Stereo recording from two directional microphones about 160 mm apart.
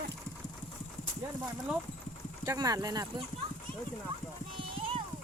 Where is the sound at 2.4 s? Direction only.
25° right (ahead or behind).